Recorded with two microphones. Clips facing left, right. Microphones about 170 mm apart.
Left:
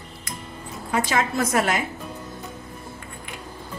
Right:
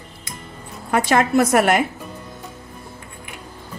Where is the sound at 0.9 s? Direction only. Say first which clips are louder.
Right 7 dB; 65° right (ahead or behind).